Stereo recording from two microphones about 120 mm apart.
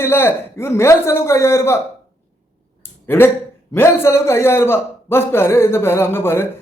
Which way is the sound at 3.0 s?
20° left (ahead or behind).